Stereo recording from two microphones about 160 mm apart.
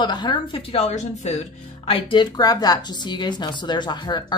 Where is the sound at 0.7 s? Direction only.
45° left (ahead or behind).